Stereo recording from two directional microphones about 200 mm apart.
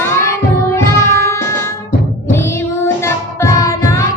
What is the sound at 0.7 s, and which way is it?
Music, 15° left (ahead or behind).